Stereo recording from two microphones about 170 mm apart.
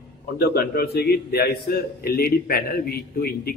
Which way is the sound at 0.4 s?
65° left (ahead or behind).